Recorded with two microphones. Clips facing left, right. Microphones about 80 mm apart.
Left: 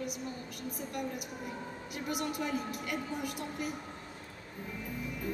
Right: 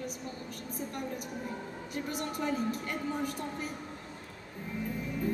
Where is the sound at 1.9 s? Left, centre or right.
Right.